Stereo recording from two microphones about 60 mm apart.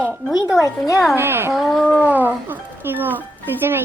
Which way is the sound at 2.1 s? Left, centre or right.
Right.